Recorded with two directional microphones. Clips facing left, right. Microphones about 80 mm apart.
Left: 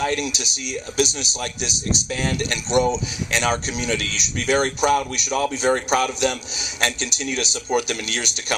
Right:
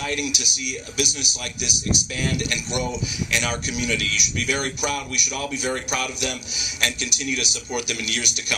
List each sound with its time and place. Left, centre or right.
0.0 s a man's voice: left